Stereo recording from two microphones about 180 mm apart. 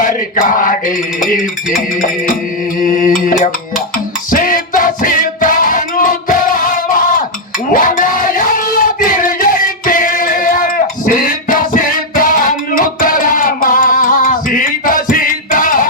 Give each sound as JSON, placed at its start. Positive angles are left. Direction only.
{"t": 0.0, "sound": "chant", "side_deg": 50}
{"t": 2.8, "sound": "mantra", "side_deg": 50}
{"t": 4.3, "sound": "music", "side_deg": 50}
{"t": 7.7, "sound": "a sound", "side_deg": 50}